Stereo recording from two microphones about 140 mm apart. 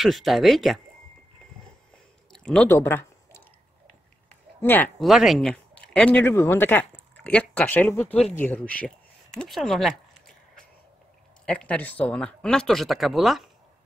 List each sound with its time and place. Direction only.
0.0 s speech: centre (ahead or behind)
2.3 s speech: 5° left (ahead or behind)
2.7 s a sound: 15° left (ahead or behind)
4.9 s speech: centre (ahead or behind)